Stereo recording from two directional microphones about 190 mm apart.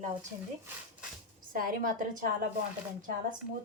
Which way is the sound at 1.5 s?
50° right (ahead or behind).